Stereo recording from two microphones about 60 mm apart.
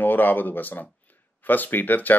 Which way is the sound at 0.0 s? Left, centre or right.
Left.